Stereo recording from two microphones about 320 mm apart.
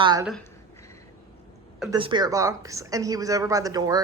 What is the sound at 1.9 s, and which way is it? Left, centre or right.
Speech, centre.